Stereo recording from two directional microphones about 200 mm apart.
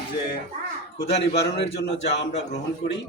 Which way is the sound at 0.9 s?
30° left (ahead or behind).